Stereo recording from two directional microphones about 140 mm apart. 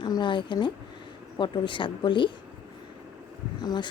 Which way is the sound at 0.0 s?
35° left (ahead or behind).